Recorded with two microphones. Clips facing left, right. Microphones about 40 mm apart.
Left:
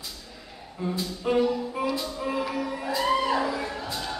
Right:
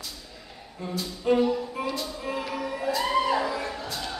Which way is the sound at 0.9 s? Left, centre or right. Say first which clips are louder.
Right 2 dB; centre.